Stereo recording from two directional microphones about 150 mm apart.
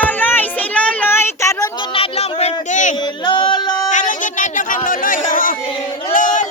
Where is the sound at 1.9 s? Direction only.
40° left (ahead or behind).